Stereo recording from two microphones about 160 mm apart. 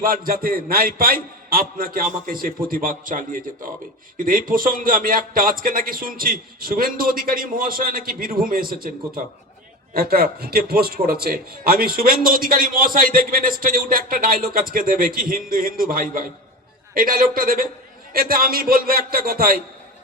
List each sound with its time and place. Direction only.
0.0 s a man's voice: 65° right (ahead or behind)